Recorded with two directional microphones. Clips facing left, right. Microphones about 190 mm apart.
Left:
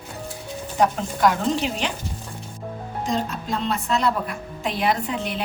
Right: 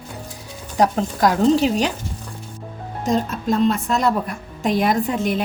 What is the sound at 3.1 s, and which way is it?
A woman's voice, 45° right (ahead or behind).